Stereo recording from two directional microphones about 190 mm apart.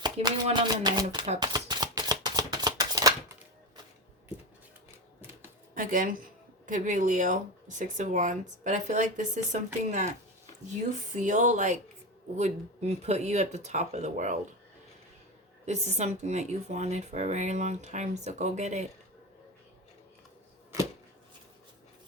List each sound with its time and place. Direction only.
0.0 s a sound: 25° right (ahead or behind)
5.7 s a woman's voice: 45° right (ahead or behind)
15.6 s speech: 35° right (ahead or behind)